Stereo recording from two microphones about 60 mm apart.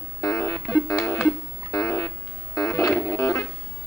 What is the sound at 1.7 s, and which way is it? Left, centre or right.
Music, left.